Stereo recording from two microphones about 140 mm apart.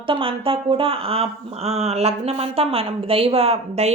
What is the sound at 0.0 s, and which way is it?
Speech, 40° right (ahead or behind).